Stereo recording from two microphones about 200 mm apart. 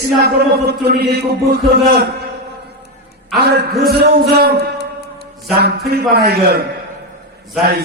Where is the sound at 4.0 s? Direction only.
55° right (ahead or behind).